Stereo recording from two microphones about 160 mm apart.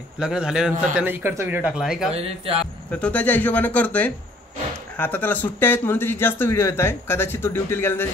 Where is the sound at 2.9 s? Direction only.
10° left (ahead or behind).